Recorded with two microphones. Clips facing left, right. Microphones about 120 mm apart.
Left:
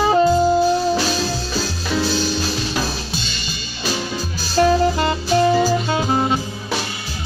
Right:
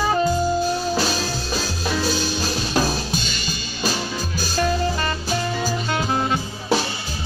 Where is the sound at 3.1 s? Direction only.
45° right (ahead or behind).